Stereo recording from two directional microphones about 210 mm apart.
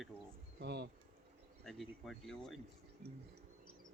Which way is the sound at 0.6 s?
55° right (ahead or behind).